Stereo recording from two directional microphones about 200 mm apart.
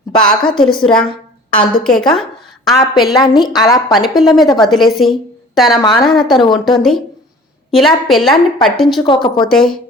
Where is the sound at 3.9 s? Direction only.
Centre (ahead or behind).